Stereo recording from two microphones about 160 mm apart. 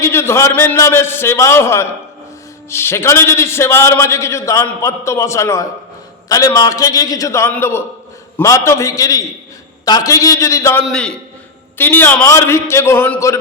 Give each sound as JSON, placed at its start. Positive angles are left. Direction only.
{"t": 0.0, "sound": "a man's voice", "side_deg": 15}
{"t": 10.8, "sound": "a man's voice", "side_deg": 5}